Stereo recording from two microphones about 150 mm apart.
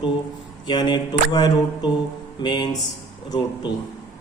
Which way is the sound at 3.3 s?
30° left (ahead or behind).